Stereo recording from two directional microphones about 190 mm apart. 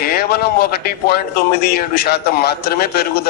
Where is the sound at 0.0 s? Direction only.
55° left (ahead or behind).